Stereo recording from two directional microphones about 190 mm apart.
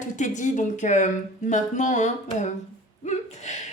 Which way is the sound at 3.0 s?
35° left (ahead or behind).